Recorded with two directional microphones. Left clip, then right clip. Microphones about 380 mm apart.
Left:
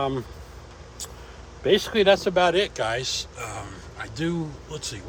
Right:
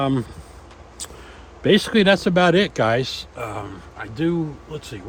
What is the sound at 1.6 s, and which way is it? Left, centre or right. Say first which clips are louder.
A man's voice: right 3 dB; right.